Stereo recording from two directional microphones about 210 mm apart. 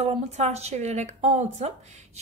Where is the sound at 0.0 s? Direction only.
30° right (ahead or behind).